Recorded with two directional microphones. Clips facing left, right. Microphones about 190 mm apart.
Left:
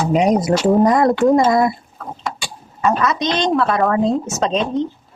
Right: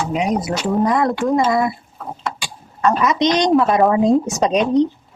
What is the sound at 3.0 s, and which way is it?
Speech, 15° right (ahead or behind).